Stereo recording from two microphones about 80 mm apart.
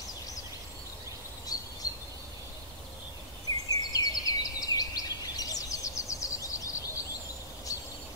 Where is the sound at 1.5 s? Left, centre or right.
Left.